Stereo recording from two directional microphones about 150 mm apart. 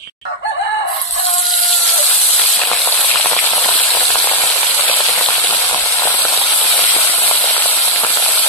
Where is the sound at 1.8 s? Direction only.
5° left (ahead or behind).